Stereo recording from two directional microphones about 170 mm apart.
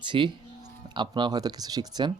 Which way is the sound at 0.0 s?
30° right (ahead or behind).